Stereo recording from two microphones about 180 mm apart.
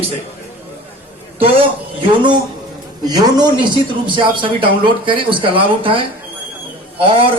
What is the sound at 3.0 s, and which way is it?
A man's voice, 20° right (ahead or behind).